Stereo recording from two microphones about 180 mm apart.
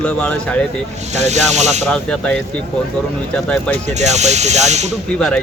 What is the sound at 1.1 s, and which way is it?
Speech, 40° right (ahead or behind).